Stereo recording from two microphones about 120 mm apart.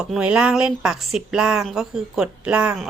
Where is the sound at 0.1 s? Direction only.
10° right (ahead or behind).